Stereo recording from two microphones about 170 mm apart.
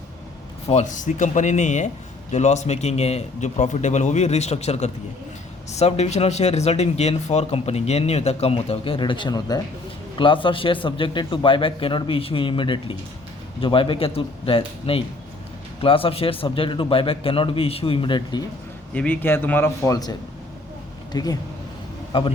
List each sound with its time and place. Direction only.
0.7 s a man's voice: 45° left (ahead or behind); by 18.4 s 25° left (ahead or behind)
18.9 s speech: 10° left (ahead or behind); by 22.3 s 30° left (ahead or behind)